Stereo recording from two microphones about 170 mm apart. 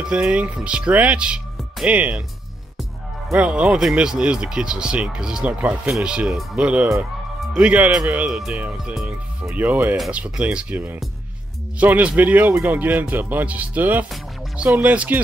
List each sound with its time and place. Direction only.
0.0 s speech: 5° right (ahead or behind)
3.3 s speech: 5° right (ahead or behind)